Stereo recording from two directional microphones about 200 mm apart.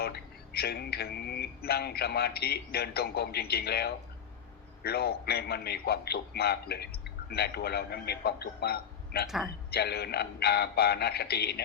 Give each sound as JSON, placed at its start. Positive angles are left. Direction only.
{"t": 0.0, "sound": "a man's voice", "side_deg": 50}